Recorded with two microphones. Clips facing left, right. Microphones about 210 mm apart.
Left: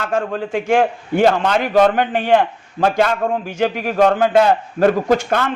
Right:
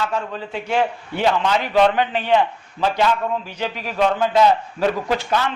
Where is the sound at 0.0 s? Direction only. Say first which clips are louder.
Left 5 dB; 50° left (ahead or behind).